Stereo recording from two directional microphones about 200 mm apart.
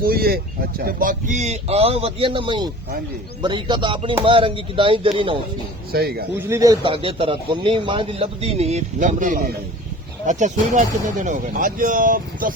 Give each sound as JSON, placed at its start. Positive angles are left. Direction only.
{"t": 0.0, "sound": "a man's voice", "side_deg": -50}
{"t": 5.9, "sound": "speech", "side_deg": -50}
{"t": 6.5, "sound": "a man's voice", "side_deg": -15}